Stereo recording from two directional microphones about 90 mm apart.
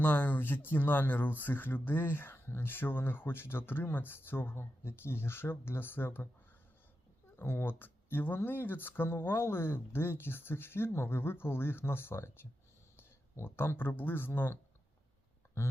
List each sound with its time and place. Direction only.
0.0 s speech: 20° left (ahead or behind)
7.3 s speech: 25° left (ahead or behind)